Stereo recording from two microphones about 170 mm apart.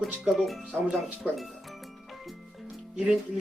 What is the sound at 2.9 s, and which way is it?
Speech, 5° right (ahead or behind).